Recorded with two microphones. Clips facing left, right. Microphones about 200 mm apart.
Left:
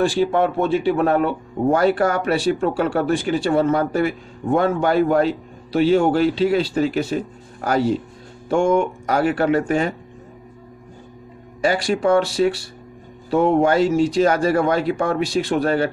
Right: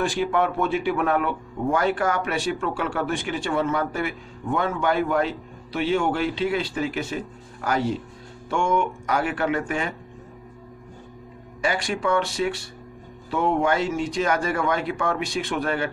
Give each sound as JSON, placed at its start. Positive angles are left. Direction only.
{"t": 0.0, "sound": "speech", "side_deg": 30}
{"t": 11.6, "sound": "speech", "side_deg": 35}